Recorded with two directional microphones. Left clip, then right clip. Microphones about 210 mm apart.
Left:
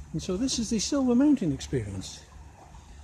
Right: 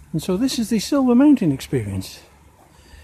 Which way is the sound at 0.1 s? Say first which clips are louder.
Right 8 dB; 45° right (ahead or behind).